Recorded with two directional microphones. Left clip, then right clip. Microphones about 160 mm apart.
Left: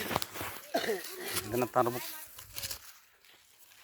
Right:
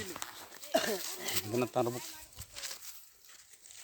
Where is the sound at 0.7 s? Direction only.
65° right (ahead or behind).